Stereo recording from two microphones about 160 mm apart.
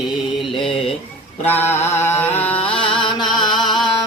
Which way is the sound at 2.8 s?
30° left (ahead or behind).